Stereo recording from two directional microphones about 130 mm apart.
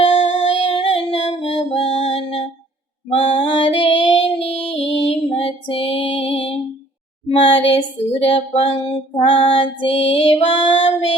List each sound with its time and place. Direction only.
0.0 s music: 45° left (ahead or behind)
3.1 s female singing: 45° left (ahead or behind)
4.4 s music: 50° left (ahead or behind)
7.3 s a sound: 45° left (ahead or behind)
9.8 s child singing: 45° left (ahead or behind)